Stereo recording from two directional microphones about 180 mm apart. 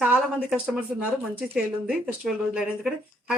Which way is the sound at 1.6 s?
5° right (ahead or behind).